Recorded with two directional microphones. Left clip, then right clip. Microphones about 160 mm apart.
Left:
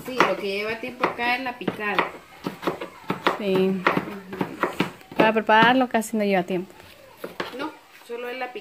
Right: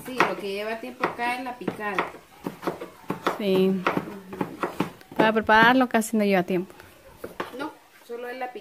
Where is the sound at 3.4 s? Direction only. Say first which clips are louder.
Right 2 dB; 25° right (ahead or behind).